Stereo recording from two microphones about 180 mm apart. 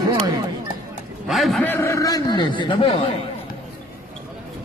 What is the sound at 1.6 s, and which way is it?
A man's voice, 15° left (ahead or behind).